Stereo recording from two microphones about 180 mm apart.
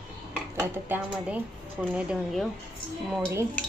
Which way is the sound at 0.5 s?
15° right (ahead or behind).